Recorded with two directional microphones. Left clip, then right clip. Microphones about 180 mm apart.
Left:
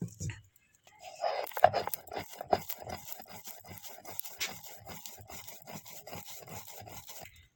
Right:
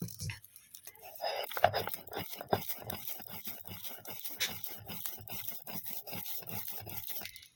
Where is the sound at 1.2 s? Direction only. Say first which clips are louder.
Left 4 dB; 10° right (ahead or behind).